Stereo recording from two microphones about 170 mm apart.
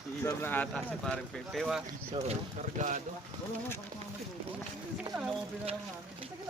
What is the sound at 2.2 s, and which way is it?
Speech, 45° right (ahead or behind).